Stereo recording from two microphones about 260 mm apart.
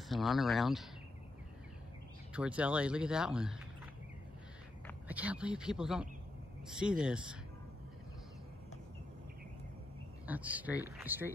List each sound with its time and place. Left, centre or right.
0.1 s speech: centre
2.3 s speech: centre
5.0 s speech: centre
10.2 s speech: centre